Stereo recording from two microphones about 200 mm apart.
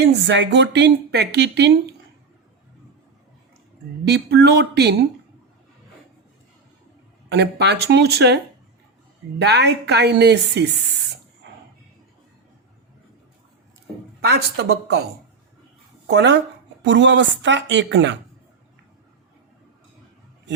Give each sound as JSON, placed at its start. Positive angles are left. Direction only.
{"t": 0.0, "sound": "speech", "side_deg": -60}
{"t": 4.0, "sound": "speech", "side_deg": -55}
{"t": 7.3, "sound": "speech", "side_deg": -55}
{"t": 9.4, "sound": "speech", "side_deg": -55}
{"t": 14.2, "sound": "speech", "side_deg": -55}
{"t": 16.0, "sound": "speech", "side_deg": -60}